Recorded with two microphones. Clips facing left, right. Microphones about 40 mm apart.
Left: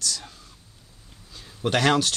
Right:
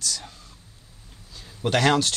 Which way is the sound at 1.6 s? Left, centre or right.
Centre.